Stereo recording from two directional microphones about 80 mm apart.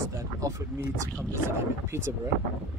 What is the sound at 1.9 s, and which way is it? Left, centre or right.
Speech, right.